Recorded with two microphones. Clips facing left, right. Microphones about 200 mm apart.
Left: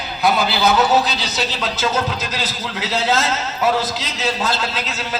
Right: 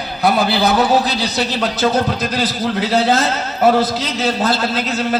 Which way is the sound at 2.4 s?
55° right (ahead or behind).